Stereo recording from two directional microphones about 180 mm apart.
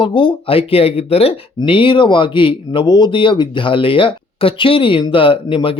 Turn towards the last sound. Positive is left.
turn(degrees=30)  # may be behind; listen again after turning